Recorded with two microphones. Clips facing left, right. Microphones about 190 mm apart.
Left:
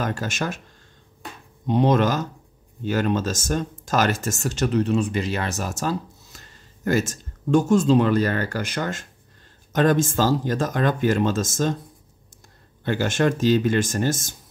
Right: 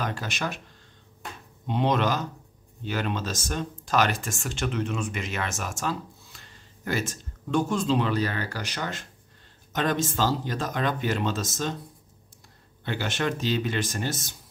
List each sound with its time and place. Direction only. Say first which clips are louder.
0.0 s speech: left 4 dB; 45° left (ahead or behind)
1.7 s speech: left 5 dB; 45° left (ahead or behind)
12.8 s speech: left 7 dB; 45° left (ahead or behind)